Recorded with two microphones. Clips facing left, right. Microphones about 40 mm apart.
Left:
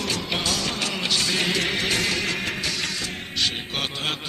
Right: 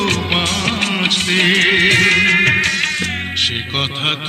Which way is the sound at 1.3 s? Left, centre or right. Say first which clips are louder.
Right 11 dB; right.